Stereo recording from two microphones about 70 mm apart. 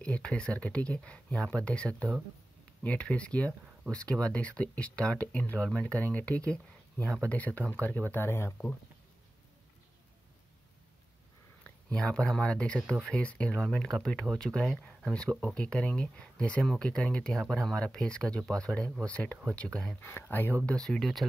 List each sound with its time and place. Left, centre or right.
0.0 s speech: centre; by 8.5 s left
11.9 s speech: centre
20.0 s speech: left
20.6 s speech: centre